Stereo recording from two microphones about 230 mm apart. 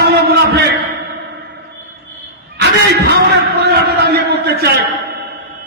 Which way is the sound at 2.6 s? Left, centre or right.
Right.